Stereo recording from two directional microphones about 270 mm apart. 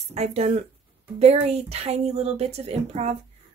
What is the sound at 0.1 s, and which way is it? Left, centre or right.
A woman's voice, right.